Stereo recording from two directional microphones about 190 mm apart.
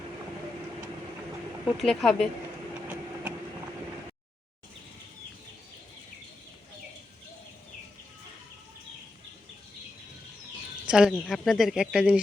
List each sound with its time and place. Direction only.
1.6 s speech: centre (ahead or behind)
10.8 s bird: 5° right (ahead or behind)
11.1 s speech: 5° left (ahead or behind)